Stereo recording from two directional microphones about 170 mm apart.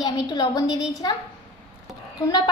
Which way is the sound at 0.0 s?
20° left (ahead or behind).